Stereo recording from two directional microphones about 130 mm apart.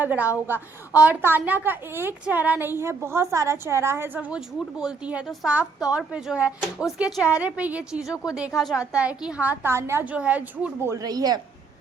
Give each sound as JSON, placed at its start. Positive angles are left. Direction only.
{"t": 0.0, "sound": "a woman's voice", "side_deg": -15}
{"t": 10.9, "sound": "a woman's voice", "side_deg": -30}